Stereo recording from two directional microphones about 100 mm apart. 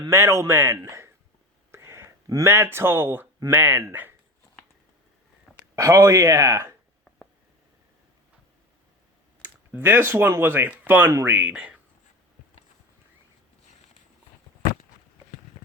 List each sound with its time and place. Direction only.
0.1 s speech: 30° right (ahead or behind)
5.7 s speech: 30° right (ahead or behind)
9.7 s speech: 20° right (ahead or behind)